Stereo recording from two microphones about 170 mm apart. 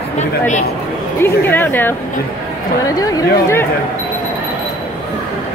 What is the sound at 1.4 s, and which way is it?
Speech, 10° left (ahead or behind).